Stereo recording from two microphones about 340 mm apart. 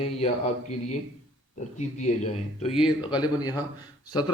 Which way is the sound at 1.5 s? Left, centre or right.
Left.